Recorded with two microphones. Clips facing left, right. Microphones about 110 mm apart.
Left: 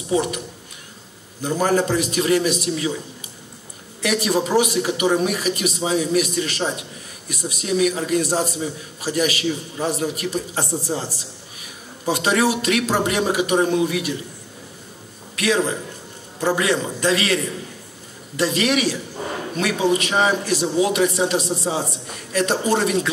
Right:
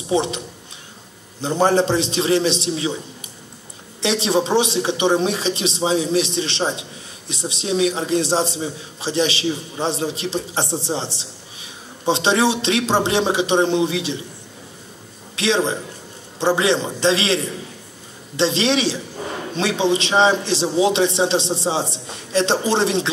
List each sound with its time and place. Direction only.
0.1 s speech: 25° right (ahead or behind)
1.4 s speech: 30° right (ahead or behind)
4.0 s speech: 25° right (ahead or behind)
15.3 s speech: 25° right (ahead or behind)